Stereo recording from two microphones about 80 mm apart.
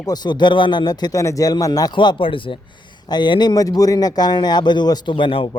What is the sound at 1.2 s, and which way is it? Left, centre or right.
Speech, left.